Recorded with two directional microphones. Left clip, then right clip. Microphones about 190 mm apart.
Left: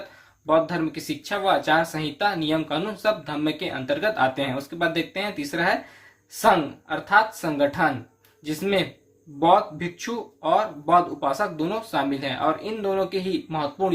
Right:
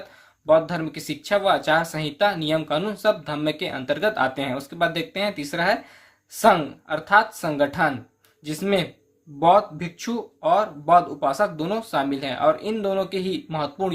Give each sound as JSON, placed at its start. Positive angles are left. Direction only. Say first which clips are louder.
{"t": 0.4, "sound": "speech", "louder": "right 2 dB", "side_deg": -40}